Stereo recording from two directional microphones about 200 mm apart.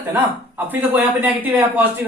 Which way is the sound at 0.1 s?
10° right (ahead or behind).